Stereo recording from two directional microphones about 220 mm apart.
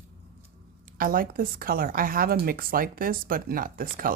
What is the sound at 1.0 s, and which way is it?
Speech, 40° right (ahead or behind).